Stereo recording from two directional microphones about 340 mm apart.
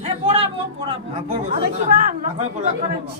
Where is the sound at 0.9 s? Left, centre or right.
Centre.